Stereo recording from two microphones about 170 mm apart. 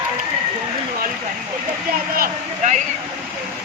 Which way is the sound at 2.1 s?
50° right (ahead or behind).